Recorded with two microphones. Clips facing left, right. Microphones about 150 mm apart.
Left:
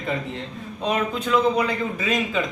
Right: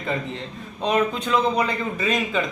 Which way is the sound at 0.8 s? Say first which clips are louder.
Right 2 dB; 5° left (ahead or behind).